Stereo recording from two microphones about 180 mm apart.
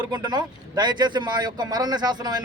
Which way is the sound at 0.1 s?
25° right (ahead or behind).